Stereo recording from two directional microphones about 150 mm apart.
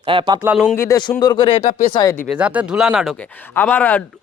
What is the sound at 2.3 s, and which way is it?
Speech, 10° right (ahead or behind).